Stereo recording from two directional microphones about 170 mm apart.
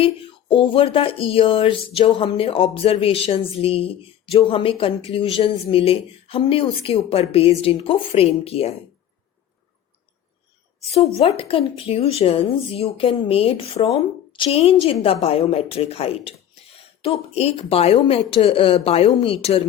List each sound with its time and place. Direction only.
0.0 s speech: 30° left (ahead or behind)
11.2 s speech: 35° left (ahead or behind)